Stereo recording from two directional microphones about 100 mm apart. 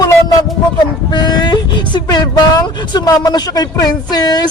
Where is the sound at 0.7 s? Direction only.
50° left (ahead or behind).